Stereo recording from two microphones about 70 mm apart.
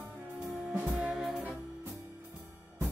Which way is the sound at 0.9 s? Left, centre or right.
Centre.